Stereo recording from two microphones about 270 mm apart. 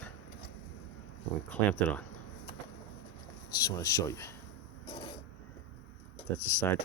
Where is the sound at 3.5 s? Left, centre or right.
Centre.